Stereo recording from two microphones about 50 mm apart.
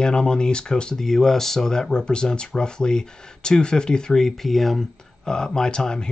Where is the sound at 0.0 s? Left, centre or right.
Centre.